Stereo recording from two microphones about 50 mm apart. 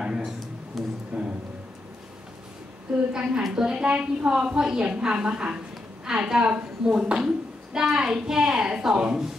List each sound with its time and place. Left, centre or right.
0.0 s a sound: centre
1.1 s music: centre
3.1 s a woman's voice: centre